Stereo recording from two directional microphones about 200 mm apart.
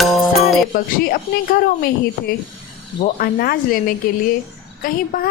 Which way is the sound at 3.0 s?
45° left (ahead or behind).